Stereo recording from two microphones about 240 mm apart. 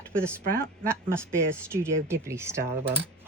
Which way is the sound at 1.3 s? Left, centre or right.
Centre.